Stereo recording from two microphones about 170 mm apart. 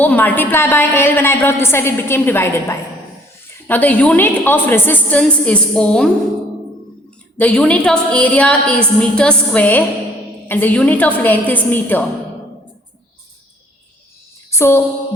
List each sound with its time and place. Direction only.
0.0 s a woman's voice: 10° left (ahead or behind)
7.3 s a woman's voice: 5° left (ahead or behind)
14.5 s a sound: 15° left (ahead or behind)